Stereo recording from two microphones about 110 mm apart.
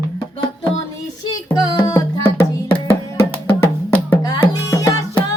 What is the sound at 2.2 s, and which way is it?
Music, 20° left (ahead or behind).